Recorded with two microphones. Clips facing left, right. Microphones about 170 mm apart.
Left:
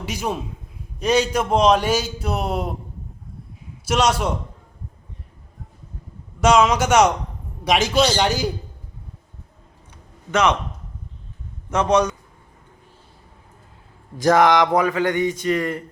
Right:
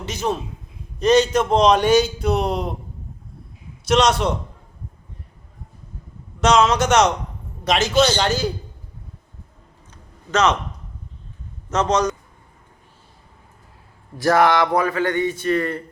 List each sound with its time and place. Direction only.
0.0 s a man's voice: 10° left (ahead or behind)
3.8 s a man's voice: 10° left (ahead or behind)
6.4 s a man's voice: 10° left (ahead or behind)
11.7 s a man's voice: 10° left (ahead or behind)
14.2 s a man's voice: 20° left (ahead or behind)